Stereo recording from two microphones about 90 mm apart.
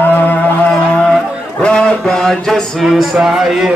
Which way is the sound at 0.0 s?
20° left (ahead or behind).